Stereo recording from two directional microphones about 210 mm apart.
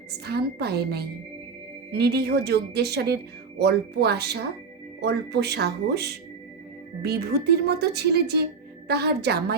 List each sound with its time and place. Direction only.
0.3 s a woman's voice: 50° right (ahead or behind)